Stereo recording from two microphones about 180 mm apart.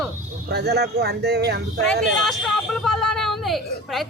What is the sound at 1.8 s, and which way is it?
Speech, centre (ahead or behind).